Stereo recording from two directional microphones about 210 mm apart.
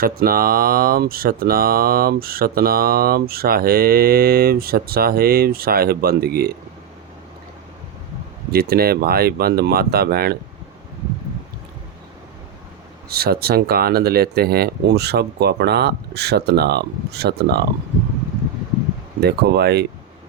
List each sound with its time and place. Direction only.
0.0 s speech: 45° right (ahead or behind)
8.5 s speech: 45° right (ahead or behind)
13.1 s speech: 50° right (ahead or behind)
19.2 s speech: 50° right (ahead or behind)